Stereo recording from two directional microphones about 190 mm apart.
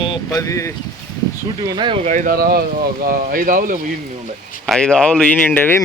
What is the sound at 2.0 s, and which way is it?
Speech, 40° right (ahead or behind).